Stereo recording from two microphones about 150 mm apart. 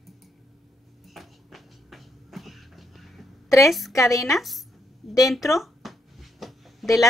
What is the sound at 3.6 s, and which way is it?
Speech, centre (ahead or behind).